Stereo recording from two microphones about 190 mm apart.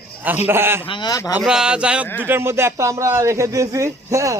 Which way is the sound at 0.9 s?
20° left (ahead or behind).